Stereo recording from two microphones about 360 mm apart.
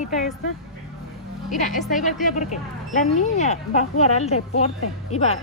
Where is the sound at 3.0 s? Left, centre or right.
Centre.